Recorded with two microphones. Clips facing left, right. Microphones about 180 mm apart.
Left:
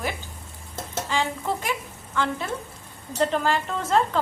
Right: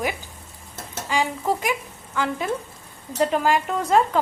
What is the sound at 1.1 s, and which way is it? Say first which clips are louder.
Stir: right 4 dB; 15° right (ahead or behind).